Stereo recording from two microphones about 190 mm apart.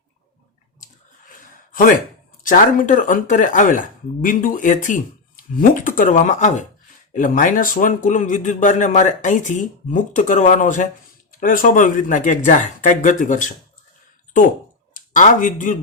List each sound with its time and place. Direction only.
1.3 s a sound: 45° left (ahead or behind)
2.4 s speech: 45° left (ahead or behind)
14.9 s speech: 45° left (ahead or behind)